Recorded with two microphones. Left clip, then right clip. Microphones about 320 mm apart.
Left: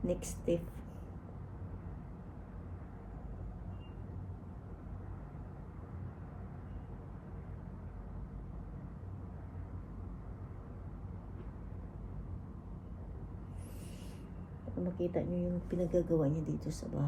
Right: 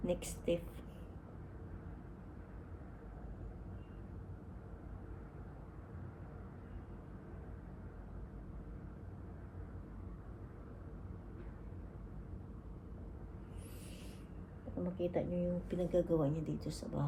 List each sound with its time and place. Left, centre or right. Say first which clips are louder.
0.0 s speech: left 2 dB; centre
14.9 s speech: left 1 dB; centre